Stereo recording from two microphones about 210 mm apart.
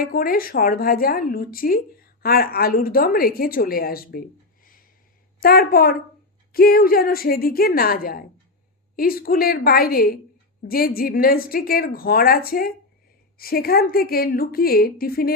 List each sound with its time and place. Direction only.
0.0 s a woman's voice: 45° left (ahead or behind)
5.4 s a woman's voice: 45° left (ahead or behind)